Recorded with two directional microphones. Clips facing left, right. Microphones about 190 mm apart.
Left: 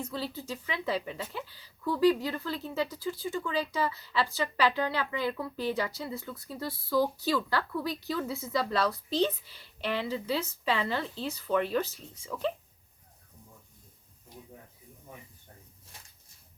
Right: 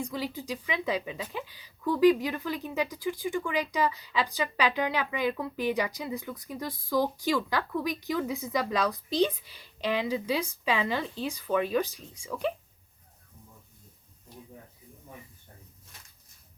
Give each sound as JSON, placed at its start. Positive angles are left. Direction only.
{"t": 0.0, "sound": "a woman's voice", "side_deg": -15}